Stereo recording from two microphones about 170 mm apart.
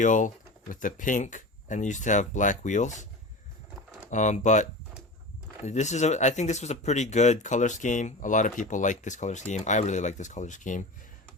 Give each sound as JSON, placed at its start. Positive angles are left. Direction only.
{"t": 0.0, "sound": "speech", "side_deg": 50}
{"t": 4.1, "sound": "speech", "side_deg": 45}
{"t": 5.6, "sound": "speech", "side_deg": 45}